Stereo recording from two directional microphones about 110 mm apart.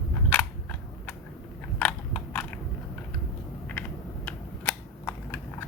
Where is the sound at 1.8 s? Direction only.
10° left (ahead or behind).